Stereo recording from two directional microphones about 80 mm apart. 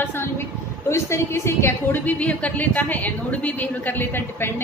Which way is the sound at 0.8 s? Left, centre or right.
Left.